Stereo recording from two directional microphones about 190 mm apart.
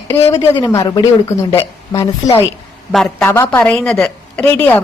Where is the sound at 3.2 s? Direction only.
10° left (ahead or behind).